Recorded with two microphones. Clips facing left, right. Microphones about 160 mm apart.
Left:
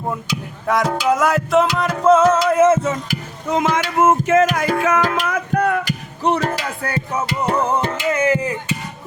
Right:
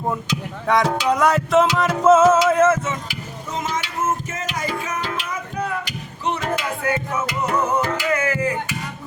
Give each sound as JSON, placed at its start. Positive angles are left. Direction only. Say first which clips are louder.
{"t": 0.7, "sound": "music", "louder": "left 1 dB", "side_deg": 0}
{"t": 2.6, "sound": "a sound", "louder": "left 3 dB", "side_deg": 20}
{"t": 2.8, "sound": "speech", "louder": "left 6 dB", "side_deg": 45}
{"t": 3.5, "sound": "speech", "louder": "left 8 dB", "side_deg": 55}
{"t": 3.9, "sound": "music", "louder": "left 15 dB", "side_deg": 70}
{"t": 4.9, "sound": "music", "louder": "left 8 dB", "side_deg": 45}
{"t": 5.3, "sound": "music", "louder": "left 8 dB", "side_deg": 65}
{"t": 5.8, "sound": "music", "louder": "left 6 dB", "side_deg": 40}